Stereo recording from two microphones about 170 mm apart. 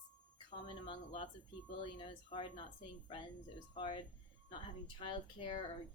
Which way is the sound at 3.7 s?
30° left (ahead or behind).